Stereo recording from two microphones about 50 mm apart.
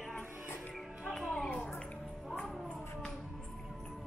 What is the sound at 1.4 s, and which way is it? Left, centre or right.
Music, centre.